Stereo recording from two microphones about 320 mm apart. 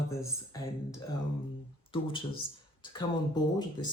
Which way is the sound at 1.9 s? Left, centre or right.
Centre.